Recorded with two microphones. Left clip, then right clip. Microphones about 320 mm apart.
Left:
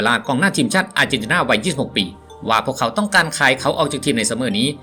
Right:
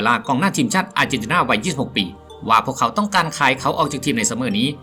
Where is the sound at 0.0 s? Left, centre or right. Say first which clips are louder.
Left 1 dB; centre.